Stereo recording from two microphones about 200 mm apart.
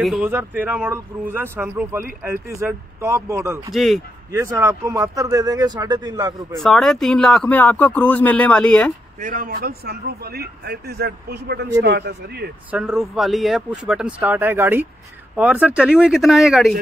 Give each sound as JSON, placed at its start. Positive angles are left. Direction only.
{"t": 0.0, "sound": "speech", "side_deg": -5}
{"t": 3.7, "sound": "speech", "side_deg": 0}
{"t": 4.3, "sound": "speech", "side_deg": -15}
{"t": 6.6, "sound": "speech", "side_deg": 0}
{"t": 9.2, "sound": "speech", "side_deg": -45}
{"t": 12.7, "sound": "speech", "side_deg": -5}